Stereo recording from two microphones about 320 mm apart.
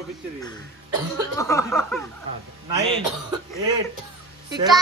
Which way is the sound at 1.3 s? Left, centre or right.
Centre.